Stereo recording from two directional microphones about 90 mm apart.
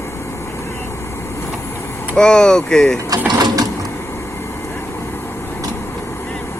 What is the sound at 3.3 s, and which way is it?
Mechanisms, 50° right (ahead or behind).